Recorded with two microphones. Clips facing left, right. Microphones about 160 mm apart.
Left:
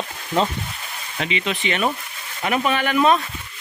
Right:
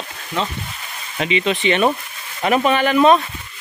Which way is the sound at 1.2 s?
25° right (ahead or behind).